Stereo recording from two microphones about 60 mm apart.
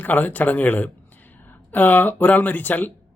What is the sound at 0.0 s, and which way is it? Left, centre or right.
A man's voice, left.